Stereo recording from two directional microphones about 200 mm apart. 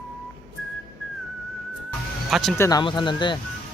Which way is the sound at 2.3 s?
Centre (ahead or behind).